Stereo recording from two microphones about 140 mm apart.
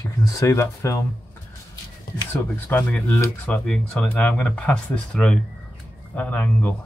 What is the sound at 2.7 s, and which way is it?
Speech, 10° left (ahead or behind).